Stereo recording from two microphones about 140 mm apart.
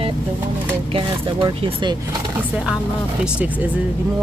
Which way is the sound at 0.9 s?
35° right (ahead or behind).